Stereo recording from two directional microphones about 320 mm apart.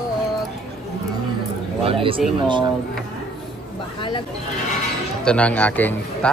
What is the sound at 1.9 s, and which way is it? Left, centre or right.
Speech, centre.